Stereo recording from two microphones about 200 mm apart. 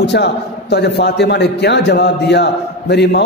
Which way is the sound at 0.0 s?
60° left (ahead or behind).